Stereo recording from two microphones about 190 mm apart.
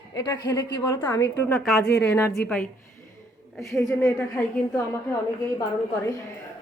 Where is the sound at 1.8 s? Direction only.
60° left (ahead or behind).